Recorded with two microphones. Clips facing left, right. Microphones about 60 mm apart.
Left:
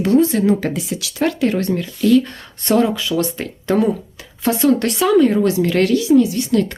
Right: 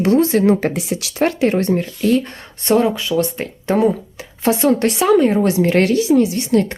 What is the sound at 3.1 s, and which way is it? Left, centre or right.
Speech, centre.